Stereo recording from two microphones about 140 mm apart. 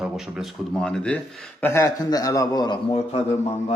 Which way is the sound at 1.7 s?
20° left (ahead or behind).